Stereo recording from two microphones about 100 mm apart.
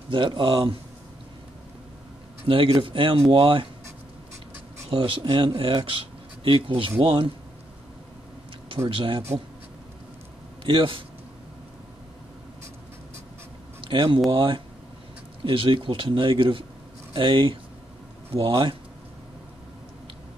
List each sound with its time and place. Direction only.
0.1 s speech: 60° right (ahead or behind)
2.4 s speech: 65° right (ahead or behind)
4.8 s speech: 70° right (ahead or behind)
8.8 s speech: 60° right (ahead or behind)
10.6 s speech: 65° right (ahead or behind)
13.8 s speech: 60° right (ahead or behind)